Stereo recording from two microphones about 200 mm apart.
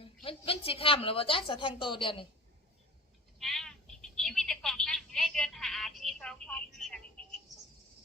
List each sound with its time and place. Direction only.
0.0 s a woman's voice: 25° left (ahead or behind)
3.3 s telephone: centre (ahead or behind)